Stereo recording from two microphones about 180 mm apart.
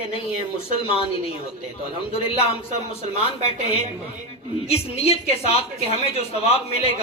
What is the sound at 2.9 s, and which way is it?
A woman's voice, 35° left (ahead or behind).